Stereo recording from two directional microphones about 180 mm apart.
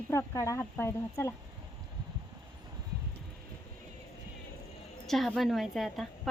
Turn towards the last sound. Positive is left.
turn(degrees=0)  # may be behind; listen again after turning